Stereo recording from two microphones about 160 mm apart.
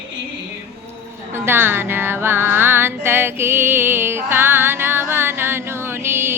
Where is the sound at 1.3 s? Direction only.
15° right (ahead or behind).